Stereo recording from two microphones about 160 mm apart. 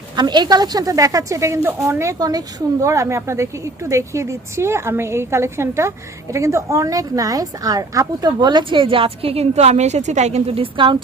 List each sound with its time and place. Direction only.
0.2 s a woman's voice: 25° right (ahead or behind)